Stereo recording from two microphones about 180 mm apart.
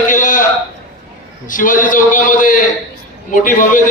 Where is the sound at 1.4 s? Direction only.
50° left (ahead or behind).